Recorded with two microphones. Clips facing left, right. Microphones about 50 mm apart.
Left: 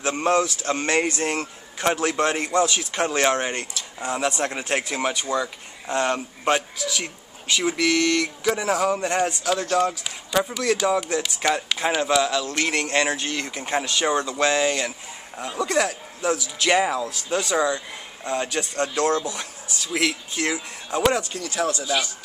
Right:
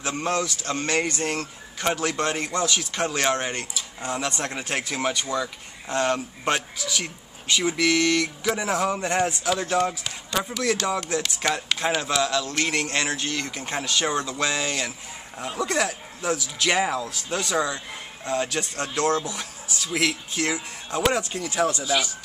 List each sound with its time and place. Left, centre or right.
0.0 s a man's voice: left; by 9.5 s centre
10.0 s a man's voice: centre
21.3 s speech: centre
21.8 s a man's voice: centre